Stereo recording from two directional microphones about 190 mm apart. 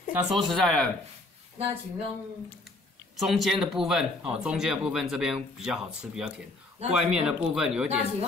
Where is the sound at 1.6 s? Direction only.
30° right (ahead or behind).